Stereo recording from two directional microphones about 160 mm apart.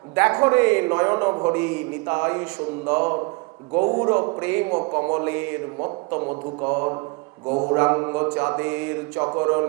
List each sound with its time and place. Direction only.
0.2 s a man's voice: 15° right (ahead or behind)
3.8 s mantra: 25° right (ahead or behind)
4.4 s a man's voice: 15° right (ahead or behind)
4.8 s mantra: 25° right (ahead or behind)
5.2 s a man's voice: 15° right (ahead or behind)
6.1 s mantra: 25° right (ahead or behind)
7.8 s a man's voice: 20° right (ahead or behind)
9.2 s mantra: 25° right (ahead or behind)